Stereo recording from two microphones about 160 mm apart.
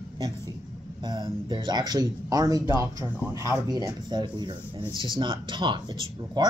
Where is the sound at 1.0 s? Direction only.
30° right (ahead or behind).